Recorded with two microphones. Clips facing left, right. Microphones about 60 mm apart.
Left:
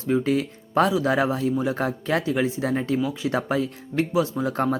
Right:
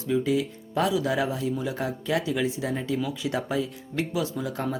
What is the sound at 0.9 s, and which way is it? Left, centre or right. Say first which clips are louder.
Speech: left 4 dB; left.